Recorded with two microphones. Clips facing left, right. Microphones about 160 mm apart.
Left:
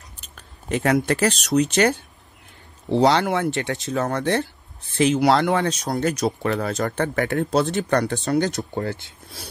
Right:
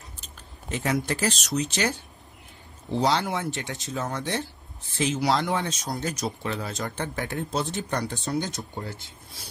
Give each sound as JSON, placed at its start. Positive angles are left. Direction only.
{"t": 0.4, "sound": "speech", "side_deg": 65}